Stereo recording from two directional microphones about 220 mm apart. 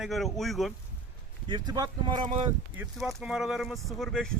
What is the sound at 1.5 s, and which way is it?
Speech, 20° right (ahead or behind).